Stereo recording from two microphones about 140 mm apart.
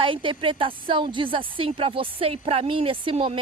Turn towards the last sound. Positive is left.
turn(degrees=-40)  # may be behind; listen again after turning